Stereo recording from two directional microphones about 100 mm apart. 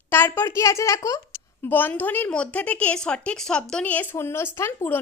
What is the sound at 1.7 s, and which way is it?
A woman's voice, 20° left (ahead or behind).